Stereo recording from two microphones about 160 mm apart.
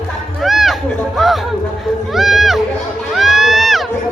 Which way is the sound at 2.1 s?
Centre (ahead or behind).